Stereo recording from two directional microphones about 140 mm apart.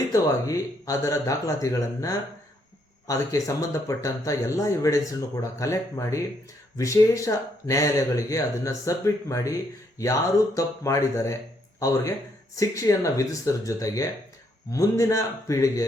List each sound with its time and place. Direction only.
0.1 s speech: 20° left (ahead or behind)